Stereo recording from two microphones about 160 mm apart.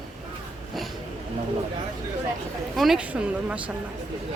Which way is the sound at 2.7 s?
Centre (ahead or behind).